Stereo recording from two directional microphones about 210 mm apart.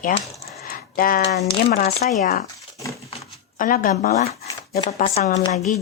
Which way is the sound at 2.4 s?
15° left (ahead or behind).